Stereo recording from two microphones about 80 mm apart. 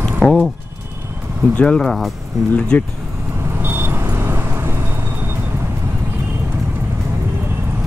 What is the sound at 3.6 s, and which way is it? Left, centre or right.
Vehicle, right.